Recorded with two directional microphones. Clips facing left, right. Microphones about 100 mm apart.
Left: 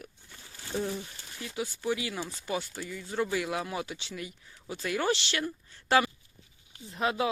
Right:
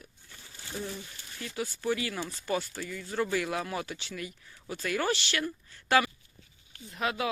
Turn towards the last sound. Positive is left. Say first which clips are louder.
# left 2 dB
turn(degrees=30)  # may be behind; listen again after turning